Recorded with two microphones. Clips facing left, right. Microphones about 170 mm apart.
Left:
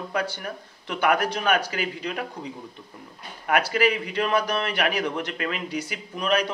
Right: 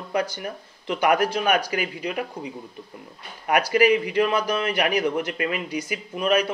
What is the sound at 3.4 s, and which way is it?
Speech, 10° right (ahead or behind).